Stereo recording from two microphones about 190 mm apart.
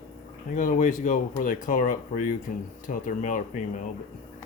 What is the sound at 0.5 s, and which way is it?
Speech, 45° left (ahead or behind).